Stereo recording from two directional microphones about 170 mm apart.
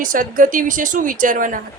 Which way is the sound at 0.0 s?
55° right (ahead or behind).